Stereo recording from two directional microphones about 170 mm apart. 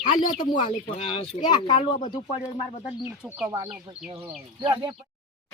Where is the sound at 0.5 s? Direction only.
30° left (ahead or behind).